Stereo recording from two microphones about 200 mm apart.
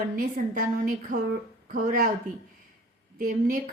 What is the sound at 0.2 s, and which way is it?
Speech, 45° right (ahead or behind).